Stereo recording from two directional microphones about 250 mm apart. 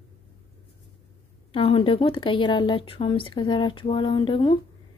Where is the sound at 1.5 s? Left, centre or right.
Left.